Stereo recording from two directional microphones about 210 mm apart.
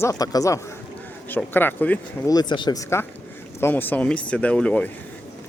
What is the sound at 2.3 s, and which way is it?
Speech, 20° left (ahead or behind).